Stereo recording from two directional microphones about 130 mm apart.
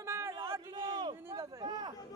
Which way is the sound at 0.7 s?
35° right (ahead or behind).